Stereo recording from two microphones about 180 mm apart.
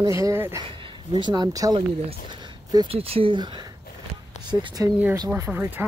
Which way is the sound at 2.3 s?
20° right (ahead or behind).